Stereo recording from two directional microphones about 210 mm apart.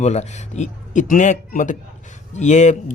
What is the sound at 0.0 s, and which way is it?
Speech, 30° left (ahead or behind).